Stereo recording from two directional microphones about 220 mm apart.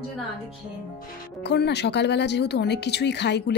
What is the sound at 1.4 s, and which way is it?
Speech, 50° left (ahead or behind).